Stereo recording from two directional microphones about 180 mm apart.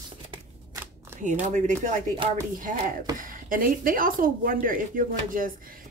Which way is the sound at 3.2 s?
50° right (ahead or behind).